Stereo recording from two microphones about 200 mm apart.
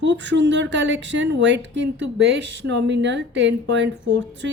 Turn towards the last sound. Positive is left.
turn(degrees=-60)  # may be behind; listen again after turning